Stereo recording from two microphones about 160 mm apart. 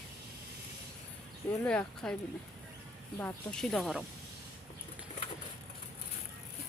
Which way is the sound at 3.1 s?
10° left (ahead or behind).